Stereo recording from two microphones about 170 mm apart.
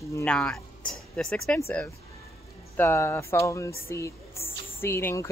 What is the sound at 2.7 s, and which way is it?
Speech, 15° left (ahead or behind).